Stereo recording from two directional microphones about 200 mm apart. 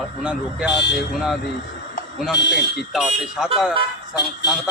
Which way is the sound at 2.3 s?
60° left (ahead or behind).